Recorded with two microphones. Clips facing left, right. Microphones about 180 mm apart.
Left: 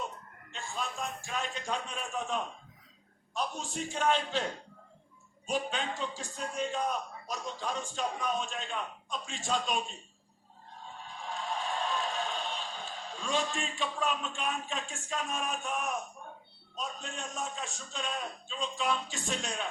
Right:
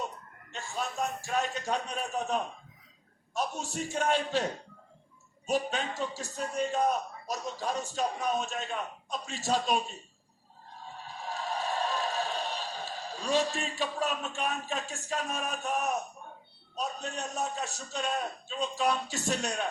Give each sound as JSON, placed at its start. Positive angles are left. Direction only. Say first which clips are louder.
{"t": 0.5, "sound": "a man's voice", "louder": "right 3 dB", "side_deg": -40}
{"t": 10.9, "sound": "a sound", "louder": "right 2 dB", "side_deg": -40}
{"t": 16.7, "sound": "a man's voice", "louder": "right 4 dB", "side_deg": -40}